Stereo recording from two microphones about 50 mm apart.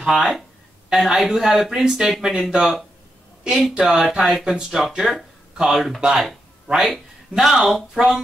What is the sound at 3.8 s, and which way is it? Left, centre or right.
Speech, centre.